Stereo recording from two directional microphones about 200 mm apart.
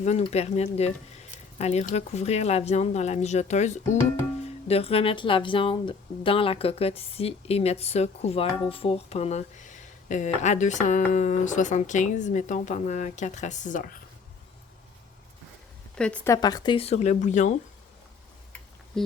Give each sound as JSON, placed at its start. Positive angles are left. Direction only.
{"t": 0.0, "sound": "speech", "side_deg": 35}
{"t": 16.0, "sound": "speech", "side_deg": 5}
{"t": 18.9, "sound": "speech", "side_deg": 0}